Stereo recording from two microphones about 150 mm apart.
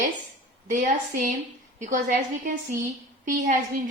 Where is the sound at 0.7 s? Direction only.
55° right (ahead or behind).